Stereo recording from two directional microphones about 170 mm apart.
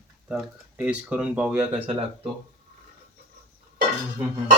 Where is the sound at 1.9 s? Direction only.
35° right (ahead or behind).